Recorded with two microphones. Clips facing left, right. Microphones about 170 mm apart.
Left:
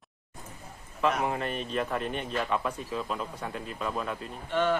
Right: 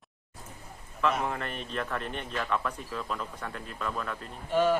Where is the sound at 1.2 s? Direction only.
20° left (ahead or behind).